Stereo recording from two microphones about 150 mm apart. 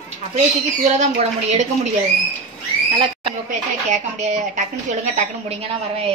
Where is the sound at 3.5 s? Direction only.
55° right (ahead or behind).